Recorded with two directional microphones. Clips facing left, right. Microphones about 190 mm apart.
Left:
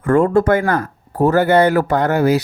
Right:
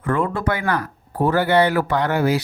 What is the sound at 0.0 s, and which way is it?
Speech, 45° left (ahead or behind).